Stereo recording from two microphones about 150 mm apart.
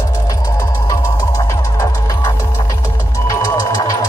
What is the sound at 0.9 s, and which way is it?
Music, 20° left (ahead or behind).